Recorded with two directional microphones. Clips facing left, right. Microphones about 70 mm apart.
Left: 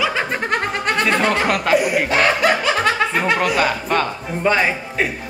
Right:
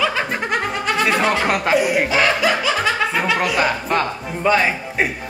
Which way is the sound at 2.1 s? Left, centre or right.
Left.